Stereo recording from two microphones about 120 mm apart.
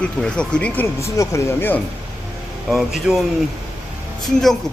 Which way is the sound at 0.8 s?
25° left (ahead or behind).